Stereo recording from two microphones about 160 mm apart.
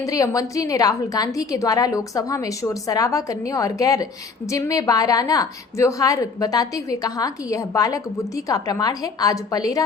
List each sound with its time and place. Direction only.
0.0 s a woman's voice: 20° left (ahead or behind)